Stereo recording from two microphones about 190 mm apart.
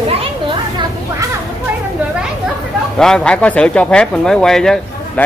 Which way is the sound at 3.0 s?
5° left (ahead or behind).